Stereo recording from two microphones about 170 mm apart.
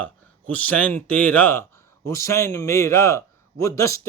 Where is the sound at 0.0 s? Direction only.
10° left (ahead or behind).